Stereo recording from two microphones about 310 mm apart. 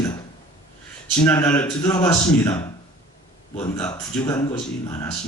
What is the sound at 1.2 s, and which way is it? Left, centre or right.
Speech, centre.